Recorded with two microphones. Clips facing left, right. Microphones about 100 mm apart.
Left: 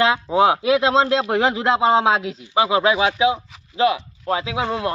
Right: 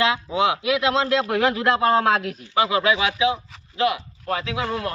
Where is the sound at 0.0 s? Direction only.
40° left (ahead or behind).